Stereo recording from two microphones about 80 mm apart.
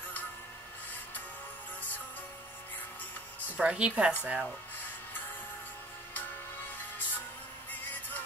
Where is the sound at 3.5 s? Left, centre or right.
Centre.